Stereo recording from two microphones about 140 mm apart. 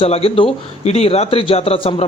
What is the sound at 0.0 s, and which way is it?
A man's voice, 45° left (ahead or behind).